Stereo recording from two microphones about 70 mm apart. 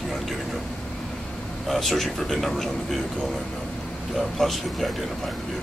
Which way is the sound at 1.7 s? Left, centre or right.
Centre.